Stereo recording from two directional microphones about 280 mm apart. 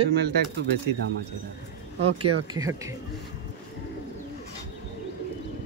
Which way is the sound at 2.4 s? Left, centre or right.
Centre.